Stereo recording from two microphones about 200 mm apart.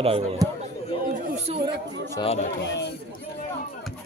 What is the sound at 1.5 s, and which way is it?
Speech, 30° right (ahead or behind).